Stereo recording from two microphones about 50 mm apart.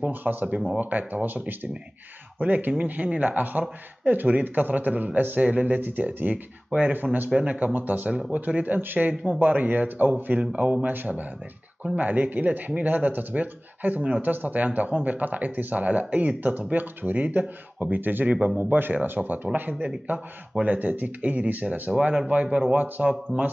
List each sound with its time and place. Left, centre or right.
0.0 s speech: right
21.9 s speech: centre